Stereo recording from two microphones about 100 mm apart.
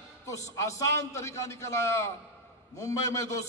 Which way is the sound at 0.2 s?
30° left (ahead or behind).